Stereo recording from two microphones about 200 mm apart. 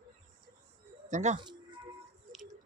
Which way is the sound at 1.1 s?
35° right (ahead or behind).